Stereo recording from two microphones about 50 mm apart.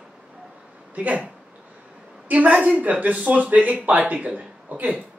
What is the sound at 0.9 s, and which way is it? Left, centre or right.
Speech, right.